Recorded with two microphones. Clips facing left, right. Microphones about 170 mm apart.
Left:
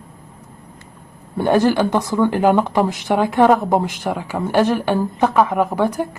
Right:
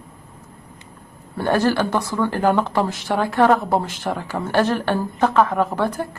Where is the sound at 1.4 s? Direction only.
20° left (ahead or behind).